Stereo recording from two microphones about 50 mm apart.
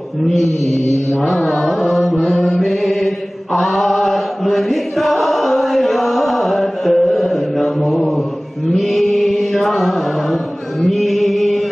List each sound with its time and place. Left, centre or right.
1.2 s carnatic music: centre
2.1 s mantra: left
2.4 s chant: centre